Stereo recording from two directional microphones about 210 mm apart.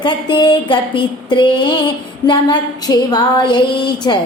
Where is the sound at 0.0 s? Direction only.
20° left (ahead or behind).